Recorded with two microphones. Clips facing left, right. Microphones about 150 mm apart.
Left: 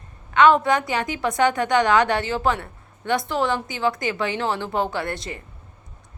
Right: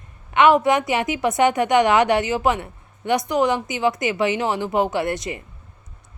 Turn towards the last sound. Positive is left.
turn(degrees=-20)  # may be behind; listen again after turning